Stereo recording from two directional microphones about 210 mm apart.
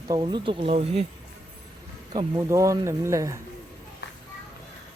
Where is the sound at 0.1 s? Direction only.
20° right (ahead or behind).